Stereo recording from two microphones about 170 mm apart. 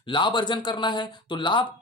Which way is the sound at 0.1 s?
30° left (ahead or behind).